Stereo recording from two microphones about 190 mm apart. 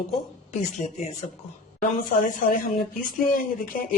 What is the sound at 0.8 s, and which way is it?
Speech, 35° left (ahead or behind).